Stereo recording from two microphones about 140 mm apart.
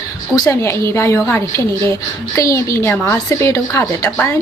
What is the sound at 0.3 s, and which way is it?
A woman's voice, 20° left (ahead or behind).